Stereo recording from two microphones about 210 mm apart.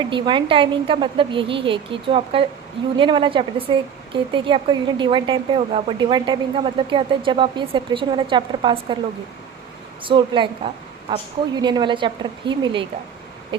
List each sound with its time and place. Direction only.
0.0 s speech: 20° right (ahead or behind)
10.0 s speech: 25° right (ahead or behind)